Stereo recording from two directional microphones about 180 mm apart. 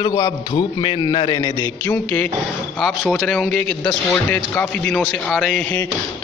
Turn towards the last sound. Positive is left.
turn(degrees=5)  # may be behind; listen again after turning